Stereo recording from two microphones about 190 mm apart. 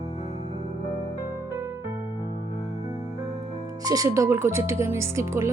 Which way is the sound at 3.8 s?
20° right (ahead or behind).